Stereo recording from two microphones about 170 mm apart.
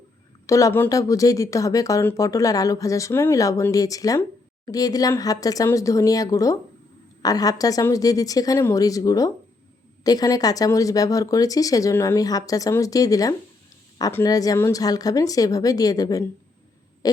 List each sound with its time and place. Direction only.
0.4 s speech: 20° left (ahead or behind)